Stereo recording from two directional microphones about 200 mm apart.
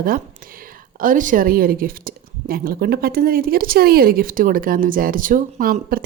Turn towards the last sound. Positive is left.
turn(degrees=-45)  # may be behind; listen again after turning